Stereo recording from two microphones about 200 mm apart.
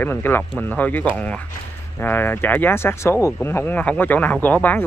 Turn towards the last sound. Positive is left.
turn(degrees=10)  # may be behind; listen again after turning